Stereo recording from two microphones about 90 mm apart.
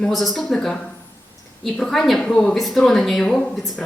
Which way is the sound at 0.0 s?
Centre (ahead or behind).